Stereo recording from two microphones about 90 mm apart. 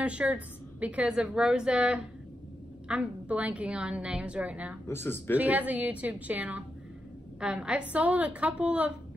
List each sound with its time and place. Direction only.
0.0 s a woman's voice: 15° right (ahead or behind)
4.8 s speech: 25° left (ahead or behind)
5.3 s a woman's voice: 15° right (ahead or behind)